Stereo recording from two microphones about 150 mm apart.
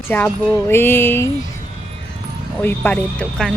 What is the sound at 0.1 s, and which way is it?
Speech, 15° left (ahead or behind).